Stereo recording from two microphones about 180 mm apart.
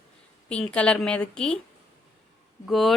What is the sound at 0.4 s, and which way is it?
Speech, 5° left (ahead or behind).